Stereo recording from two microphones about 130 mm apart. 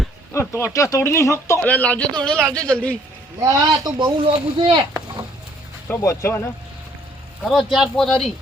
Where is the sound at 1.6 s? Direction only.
10° left (ahead or behind).